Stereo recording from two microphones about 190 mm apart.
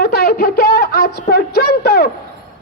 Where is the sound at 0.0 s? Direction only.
55° left (ahead or behind).